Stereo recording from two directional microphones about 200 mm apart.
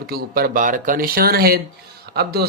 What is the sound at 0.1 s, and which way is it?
Speech, 50° right (ahead or behind).